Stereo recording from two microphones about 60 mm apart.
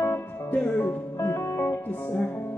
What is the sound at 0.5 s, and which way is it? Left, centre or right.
Music, left.